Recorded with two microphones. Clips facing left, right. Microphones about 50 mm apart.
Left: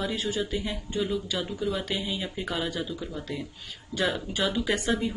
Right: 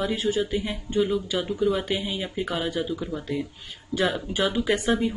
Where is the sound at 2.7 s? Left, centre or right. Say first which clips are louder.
Right 5 dB; centre.